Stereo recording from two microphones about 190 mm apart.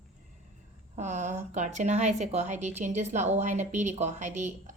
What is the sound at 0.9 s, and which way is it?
Speech, 40° right (ahead or behind).